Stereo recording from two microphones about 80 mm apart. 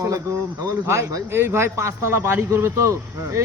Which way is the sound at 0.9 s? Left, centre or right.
Right.